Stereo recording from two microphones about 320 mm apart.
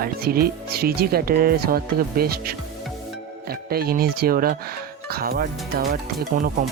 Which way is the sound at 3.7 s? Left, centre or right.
Right.